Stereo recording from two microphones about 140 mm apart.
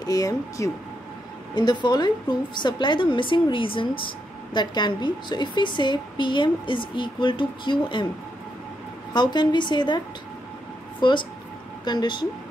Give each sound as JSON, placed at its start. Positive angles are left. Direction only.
{"t": 0.0, "sound": "a woman's voice", "side_deg": 25}
{"t": 9.1, "sound": "a woman's voice", "side_deg": 30}